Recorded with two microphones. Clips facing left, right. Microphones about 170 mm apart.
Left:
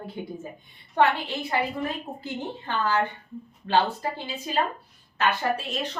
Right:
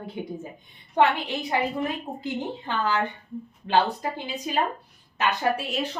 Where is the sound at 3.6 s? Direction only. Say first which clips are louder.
Right 1 dB; 15° right (ahead or behind).